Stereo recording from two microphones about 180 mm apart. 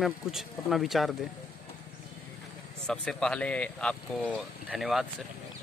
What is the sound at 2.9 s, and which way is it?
Speech, 5° left (ahead or behind).